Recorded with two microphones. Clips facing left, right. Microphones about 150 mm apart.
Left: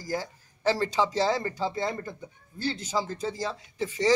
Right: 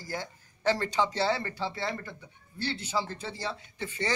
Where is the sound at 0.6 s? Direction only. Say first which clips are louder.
Left 2 dB; 10° left (ahead or behind).